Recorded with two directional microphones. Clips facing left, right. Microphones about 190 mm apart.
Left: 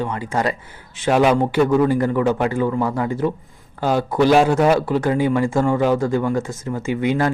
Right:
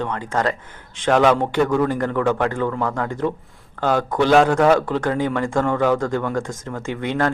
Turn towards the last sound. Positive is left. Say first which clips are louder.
# left 3 dB
turn(degrees=5)  # may be behind; listen again after turning